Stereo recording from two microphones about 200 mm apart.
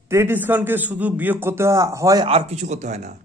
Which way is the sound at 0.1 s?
10° right (ahead or behind).